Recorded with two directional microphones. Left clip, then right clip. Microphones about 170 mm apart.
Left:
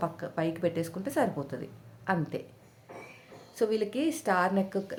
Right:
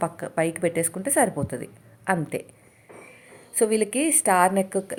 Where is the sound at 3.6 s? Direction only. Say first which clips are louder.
Right 6 dB; 30° right (ahead or behind).